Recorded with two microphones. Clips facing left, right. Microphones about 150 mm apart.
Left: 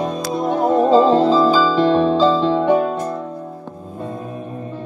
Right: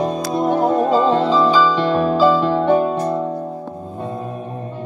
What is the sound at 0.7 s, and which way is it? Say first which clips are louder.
Music: left 3 dB; 25° left (ahead or behind).